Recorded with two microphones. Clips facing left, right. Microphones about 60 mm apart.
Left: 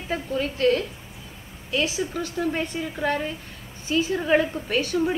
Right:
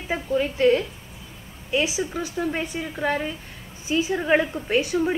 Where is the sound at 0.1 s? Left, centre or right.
Centre.